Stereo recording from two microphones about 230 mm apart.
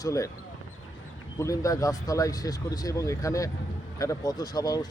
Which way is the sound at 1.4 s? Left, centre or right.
Centre.